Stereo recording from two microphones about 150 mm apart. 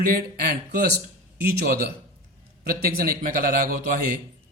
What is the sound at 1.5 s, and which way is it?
Speech, 85° right.